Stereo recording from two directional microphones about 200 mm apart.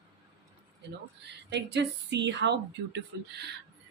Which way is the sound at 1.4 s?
60° right (ahead or behind).